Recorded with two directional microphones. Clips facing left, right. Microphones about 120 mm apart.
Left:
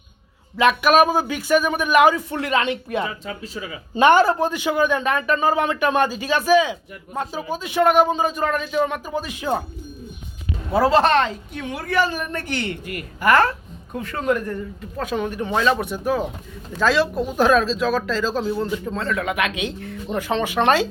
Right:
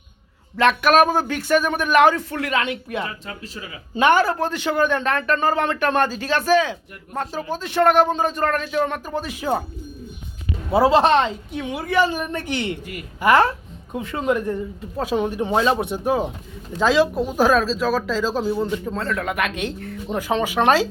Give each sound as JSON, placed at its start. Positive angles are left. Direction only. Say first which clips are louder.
{"t": 0.5, "sound": "a man's voice", "louder": "even", "side_deg": 5}
{"t": 2.3, "sound": "speech", "louder": "left 2 dB", "side_deg": 25}
{"t": 4.4, "sound": "a man's voice", "louder": "left 1 dB", "side_deg": 10}
{"t": 10.8, "sound": "a man's voice", "louder": "right 1 dB", "side_deg": -20}
{"t": 12.7, "sound": "speech", "louder": "left 1 dB", "side_deg": 55}
{"t": 13.1, "sound": "a man's voice", "louder": "right 1 dB", "side_deg": -20}